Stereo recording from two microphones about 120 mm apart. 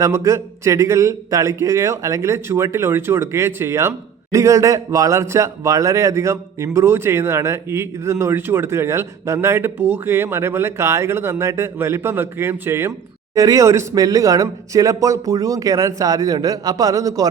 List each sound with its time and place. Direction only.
0.0 s a man's voice: 25° right (ahead or behind)